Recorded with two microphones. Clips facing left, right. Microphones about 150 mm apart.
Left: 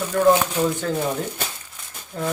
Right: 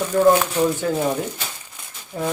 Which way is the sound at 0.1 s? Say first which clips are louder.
Right 2 dB; 20° right (ahead or behind).